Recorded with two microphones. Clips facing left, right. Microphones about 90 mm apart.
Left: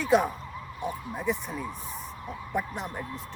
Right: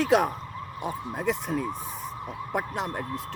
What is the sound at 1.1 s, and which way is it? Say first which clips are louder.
Speech: right 5 dB; 85° right.